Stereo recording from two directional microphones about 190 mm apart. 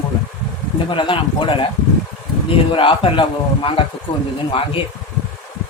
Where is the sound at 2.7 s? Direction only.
25° left (ahead or behind).